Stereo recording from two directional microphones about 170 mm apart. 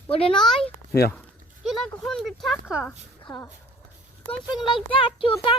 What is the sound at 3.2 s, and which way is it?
A child's voice, 20° left (ahead or behind).